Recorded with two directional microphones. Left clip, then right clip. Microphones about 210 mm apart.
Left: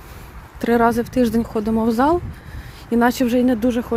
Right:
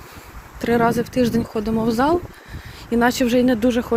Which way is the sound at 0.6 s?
30° left (ahead or behind).